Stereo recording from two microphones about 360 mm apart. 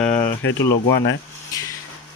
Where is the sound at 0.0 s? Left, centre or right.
Centre.